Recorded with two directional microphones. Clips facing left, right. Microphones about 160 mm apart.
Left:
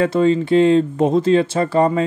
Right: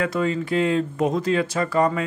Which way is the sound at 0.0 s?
30° left (ahead or behind).